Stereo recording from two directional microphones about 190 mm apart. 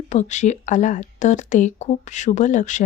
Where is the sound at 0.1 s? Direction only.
40° left (ahead or behind).